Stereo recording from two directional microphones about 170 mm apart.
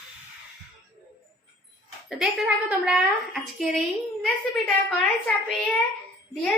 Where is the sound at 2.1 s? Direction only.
5° right (ahead or behind).